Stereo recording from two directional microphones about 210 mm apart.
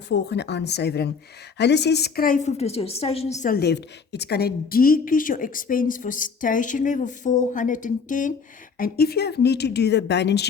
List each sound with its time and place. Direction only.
0.1 s a woman's voice: 55° left (ahead or behind); by 3.2 s 30° left (ahead or behind)
3.4 s a woman's voice: 45° left (ahead or behind)